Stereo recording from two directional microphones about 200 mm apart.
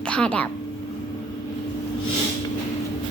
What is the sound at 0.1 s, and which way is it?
Speech, 5° left (ahead or behind).